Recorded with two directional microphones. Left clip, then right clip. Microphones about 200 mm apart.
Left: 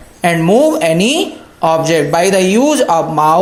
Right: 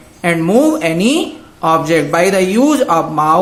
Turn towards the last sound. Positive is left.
turn(degrees=25)  # may be behind; listen again after turning